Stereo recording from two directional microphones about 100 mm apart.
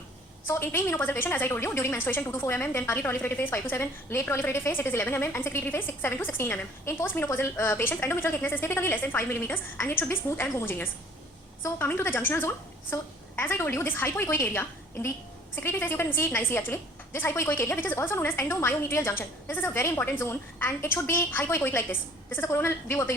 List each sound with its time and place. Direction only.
0.4 s speech: 25° left (ahead or behind)